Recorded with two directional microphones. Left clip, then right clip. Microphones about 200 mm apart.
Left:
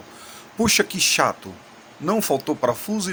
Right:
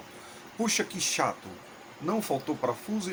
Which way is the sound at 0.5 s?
45° left (ahead or behind).